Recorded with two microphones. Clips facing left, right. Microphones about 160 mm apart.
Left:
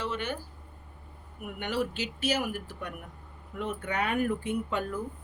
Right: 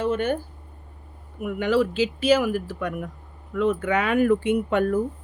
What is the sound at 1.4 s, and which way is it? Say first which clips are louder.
Speech: right 10 dB; 90° right.